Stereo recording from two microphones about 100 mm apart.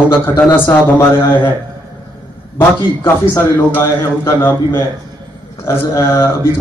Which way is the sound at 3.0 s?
25° left (ahead or behind).